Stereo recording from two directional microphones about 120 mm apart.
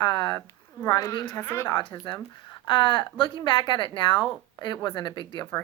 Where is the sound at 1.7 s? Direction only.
40° left (ahead or behind).